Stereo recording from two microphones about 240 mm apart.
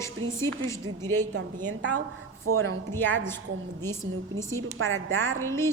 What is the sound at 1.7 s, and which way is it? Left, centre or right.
Speech, right.